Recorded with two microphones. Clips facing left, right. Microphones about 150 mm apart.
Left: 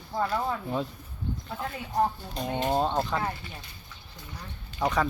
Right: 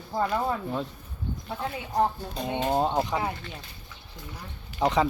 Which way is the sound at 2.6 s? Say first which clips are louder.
Right 1 dB; 10° right (ahead or behind).